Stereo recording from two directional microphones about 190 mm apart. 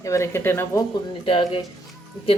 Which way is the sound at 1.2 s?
25° left (ahead or behind).